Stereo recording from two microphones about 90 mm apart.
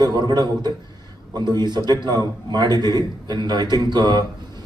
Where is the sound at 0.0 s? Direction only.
50° right (ahead or behind).